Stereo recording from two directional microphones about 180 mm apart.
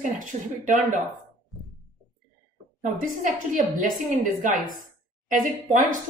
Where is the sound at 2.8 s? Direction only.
45° right (ahead or behind).